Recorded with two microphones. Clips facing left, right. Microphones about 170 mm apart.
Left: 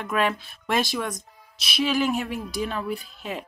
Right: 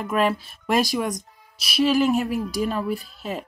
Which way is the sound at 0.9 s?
15° right (ahead or behind).